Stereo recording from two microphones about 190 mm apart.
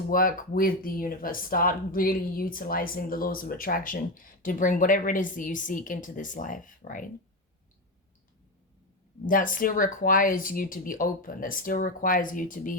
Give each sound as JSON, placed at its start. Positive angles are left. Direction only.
{"t": 0.1, "sound": "speech", "side_deg": 45}
{"t": 9.2, "sound": "speech", "side_deg": 45}